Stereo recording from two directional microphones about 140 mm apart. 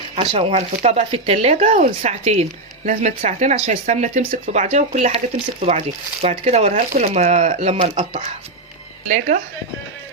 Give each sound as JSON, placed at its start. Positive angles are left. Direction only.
{"t": 0.2, "sound": "speech", "side_deg": -50}
{"t": 2.9, "sound": "speech", "side_deg": -70}
{"t": 9.0, "sound": "speech", "side_deg": -60}